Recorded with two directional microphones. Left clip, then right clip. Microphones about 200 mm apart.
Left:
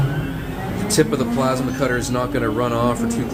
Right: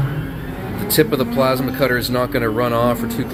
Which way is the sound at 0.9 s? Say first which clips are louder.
Right 3 dB; 5° right (ahead or behind).